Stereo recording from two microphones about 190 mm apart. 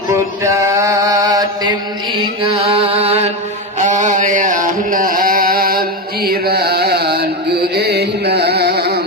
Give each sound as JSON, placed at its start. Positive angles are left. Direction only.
{"t": 0.4, "sound": "mantra", "side_deg": -15}
{"t": 2.4, "sound": "chant", "side_deg": -30}
{"t": 3.8, "sound": "a sound", "side_deg": -40}